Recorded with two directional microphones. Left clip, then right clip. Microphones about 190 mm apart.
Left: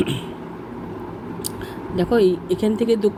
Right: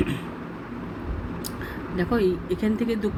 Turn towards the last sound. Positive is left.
turn(degrees=15)  # may be behind; listen again after turning